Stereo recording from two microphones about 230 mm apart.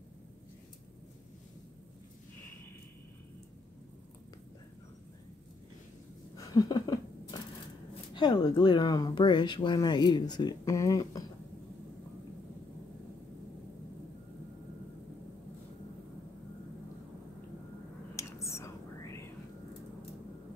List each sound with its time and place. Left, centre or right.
6.3 s a sound: centre
8.1 s speech: centre
18.1 s whispering: centre